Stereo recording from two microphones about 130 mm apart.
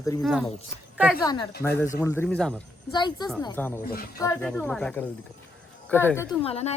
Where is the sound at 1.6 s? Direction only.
15° left (ahead or behind).